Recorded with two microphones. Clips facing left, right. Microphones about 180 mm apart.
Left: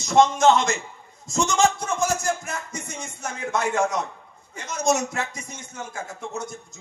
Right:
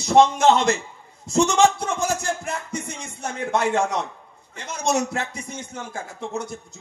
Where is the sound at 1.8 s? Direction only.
30° right (ahead or behind).